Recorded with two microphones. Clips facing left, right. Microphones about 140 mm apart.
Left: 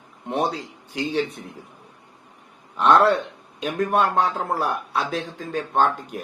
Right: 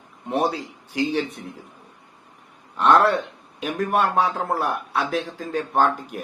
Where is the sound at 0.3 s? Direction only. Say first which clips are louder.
Right 1 dB; centre (ahead or behind).